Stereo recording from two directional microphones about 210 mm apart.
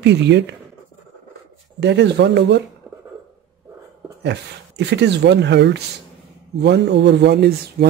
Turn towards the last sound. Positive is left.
turn(degrees=-50)  # may be behind; listen again after turning